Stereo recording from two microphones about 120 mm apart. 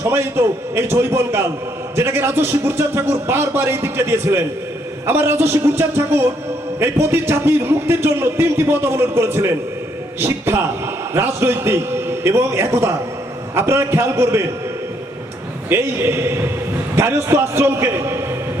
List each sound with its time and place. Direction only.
0.0 s a man's voice: 20° right (ahead or behind)
15.7 s a man's voice: 20° right (ahead or behind)